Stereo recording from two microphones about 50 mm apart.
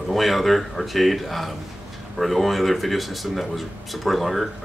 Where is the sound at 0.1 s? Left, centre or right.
Centre.